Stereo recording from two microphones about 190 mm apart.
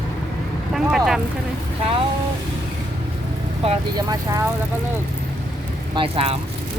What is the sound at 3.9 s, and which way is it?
Speech, 20° right (ahead or behind).